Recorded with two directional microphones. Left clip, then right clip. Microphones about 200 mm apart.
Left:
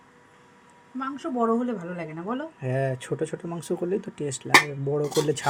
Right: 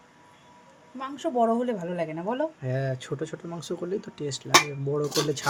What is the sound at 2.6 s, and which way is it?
Speech, 15° left (ahead or behind).